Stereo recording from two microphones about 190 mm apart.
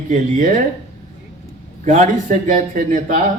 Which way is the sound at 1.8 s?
40° right (ahead or behind).